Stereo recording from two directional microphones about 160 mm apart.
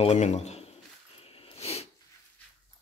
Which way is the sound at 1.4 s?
40° left (ahead or behind).